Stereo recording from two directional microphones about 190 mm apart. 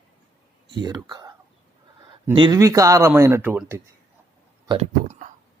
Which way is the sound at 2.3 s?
20° right (ahead or behind).